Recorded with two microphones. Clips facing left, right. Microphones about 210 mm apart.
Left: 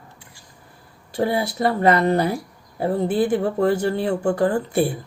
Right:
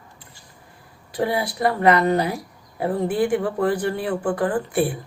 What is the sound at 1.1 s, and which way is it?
A woman's voice, 25° left (ahead or behind).